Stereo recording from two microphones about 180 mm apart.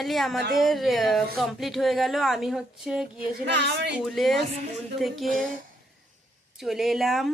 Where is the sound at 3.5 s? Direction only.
70° right (ahead or behind).